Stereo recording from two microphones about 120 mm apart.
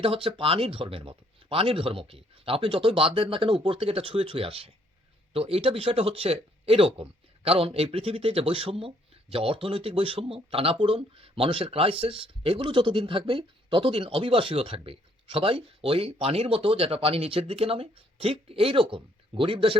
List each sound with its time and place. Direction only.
0.0 s speech: 50° right (ahead or behind)